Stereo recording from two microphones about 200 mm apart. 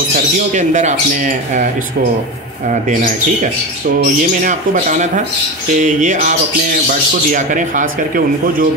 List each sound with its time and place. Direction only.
0.1 s speech: 40° right (ahead or behind)
4.0 s speech: 40° right (ahead or behind)